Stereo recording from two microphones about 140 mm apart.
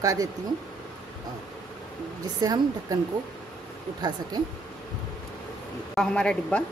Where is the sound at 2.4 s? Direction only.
25° right (ahead or behind).